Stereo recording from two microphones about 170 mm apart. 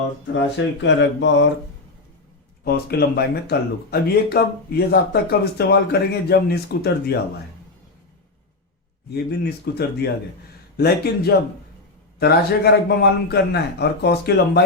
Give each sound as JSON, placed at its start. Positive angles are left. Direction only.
{"t": 0.3, "sound": "speech", "side_deg": 90}
{"t": 2.6, "sound": "a man's voice", "side_deg": 70}
{"t": 9.1, "sound": "a man's voice", "side_deg": 70}